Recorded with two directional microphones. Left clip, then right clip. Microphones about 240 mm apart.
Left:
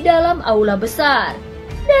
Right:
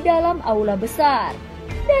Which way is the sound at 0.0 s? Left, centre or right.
Right.